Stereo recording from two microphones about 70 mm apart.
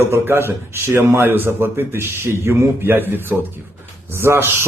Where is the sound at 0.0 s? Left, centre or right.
Right.